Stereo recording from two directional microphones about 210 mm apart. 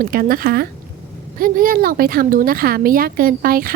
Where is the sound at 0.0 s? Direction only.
45° right (ahead or behind).